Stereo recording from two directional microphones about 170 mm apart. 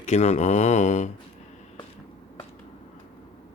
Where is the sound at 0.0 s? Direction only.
40° left (ahead or behind).